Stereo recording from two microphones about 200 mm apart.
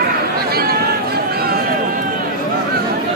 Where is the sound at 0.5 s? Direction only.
50° right (ahead or behind).